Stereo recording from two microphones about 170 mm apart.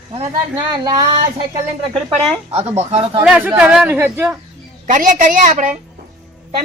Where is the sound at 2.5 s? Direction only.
35° right (ahead or behind).